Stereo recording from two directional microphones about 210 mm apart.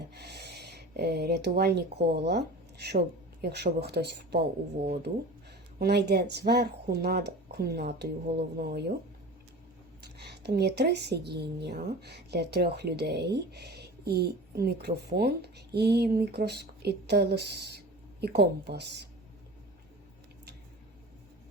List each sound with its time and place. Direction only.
0.1 s a woman's voice: 50° right (ahead or behind)
5.8 s a woman's voice: 50° right (ahead or behind)
10.2 s a woman's voice: 50° right (ahead or behind)